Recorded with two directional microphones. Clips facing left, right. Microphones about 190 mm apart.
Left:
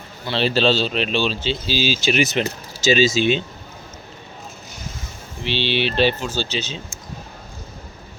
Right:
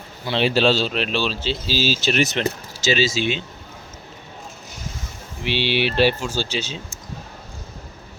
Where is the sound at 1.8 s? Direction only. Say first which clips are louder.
Even; 40° right (ahead or behind).